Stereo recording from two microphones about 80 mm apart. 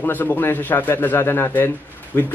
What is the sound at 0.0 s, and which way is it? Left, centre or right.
Speech, left.